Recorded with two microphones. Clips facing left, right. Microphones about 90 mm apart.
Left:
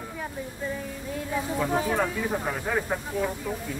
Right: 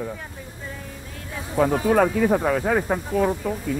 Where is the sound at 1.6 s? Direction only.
65° right (ahead or behind).